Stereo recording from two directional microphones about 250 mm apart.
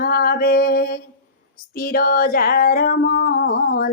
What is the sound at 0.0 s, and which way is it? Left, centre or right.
Female singing, left.